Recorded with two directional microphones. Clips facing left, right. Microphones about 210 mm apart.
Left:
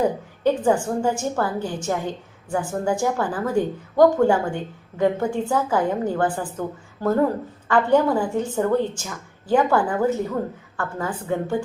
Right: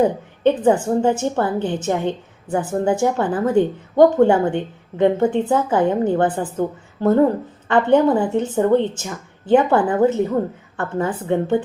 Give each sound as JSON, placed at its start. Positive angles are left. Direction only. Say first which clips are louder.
{"t": 0.4, "sound": "a woman's voice", "louder": "right 4 dB", "side_deg": -20}